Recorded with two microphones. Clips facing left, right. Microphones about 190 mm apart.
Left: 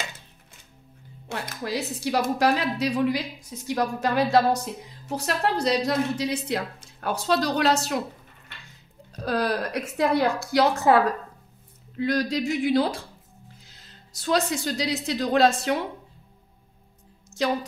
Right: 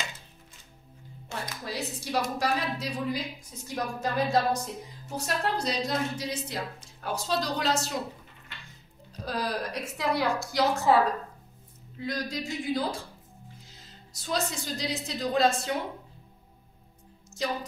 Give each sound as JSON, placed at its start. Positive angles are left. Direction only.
{"t": 1.3, "sound": "a woman's voice", "side_deg": 70}
{"t": 9.2, "sound": "a woman's voice", "side_deg": 70}
{"t": 12.0, "sound": "a woman's voice", "side_deg": 75}
{"t": 14.1, "sound": "a woman's voice", "side_deg": 75}